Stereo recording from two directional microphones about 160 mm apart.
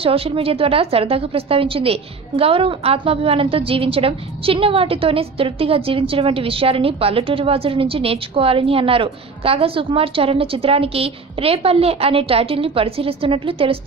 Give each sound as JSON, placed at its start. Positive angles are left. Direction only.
{"t": 0.0, "sound": "a woman's voice", "side_deg": -35}